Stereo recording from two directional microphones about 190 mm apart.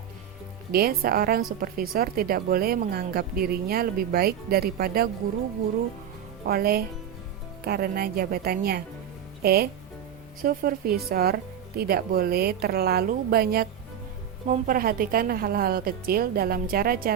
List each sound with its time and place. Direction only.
0.7 s speech: 55° right (ahead or behind)
6.5 s speech: 55° right (ahead or behind)